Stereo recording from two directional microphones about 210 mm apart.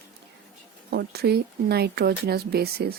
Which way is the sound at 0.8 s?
50° right (ahead or behind).